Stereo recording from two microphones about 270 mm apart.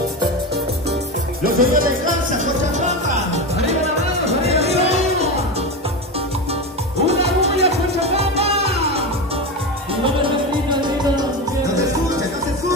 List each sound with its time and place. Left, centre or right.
1.4 s music: right
4.3 s music: right
7.1 s music: right
10.0 s music: centre